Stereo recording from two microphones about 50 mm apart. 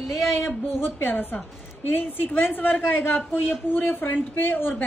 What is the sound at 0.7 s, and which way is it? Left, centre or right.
Speech, left.